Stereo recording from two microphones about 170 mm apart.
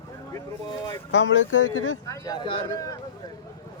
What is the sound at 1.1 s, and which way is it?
Speech, 90° left.